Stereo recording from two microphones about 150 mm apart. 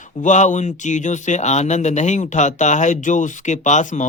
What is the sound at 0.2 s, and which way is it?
Speech, 55° left (ahead or behind).